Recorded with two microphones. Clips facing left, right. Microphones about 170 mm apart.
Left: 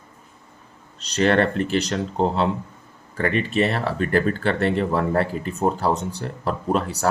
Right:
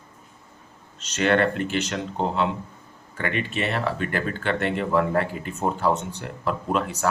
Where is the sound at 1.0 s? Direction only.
35° left (ahead or behind).